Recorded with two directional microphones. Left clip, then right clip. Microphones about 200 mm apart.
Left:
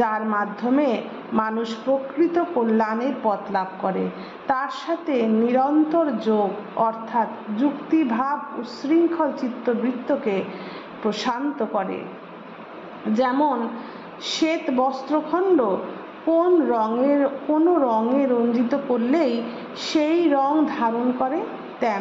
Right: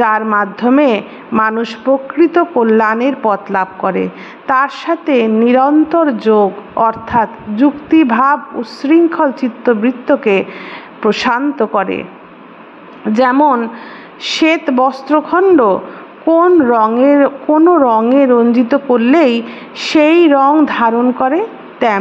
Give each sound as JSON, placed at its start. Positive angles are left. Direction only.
{"t": 0.0, "sound": "a woman's voice", "side_deg": -30}
{"t": 13.1, "sound": "a woman's voice", "side_deg": -25}